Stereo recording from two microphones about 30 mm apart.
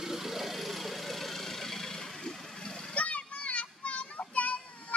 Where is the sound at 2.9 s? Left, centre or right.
Left.